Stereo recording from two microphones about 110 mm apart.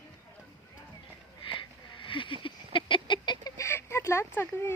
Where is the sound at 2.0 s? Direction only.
50° left (ahead or behind).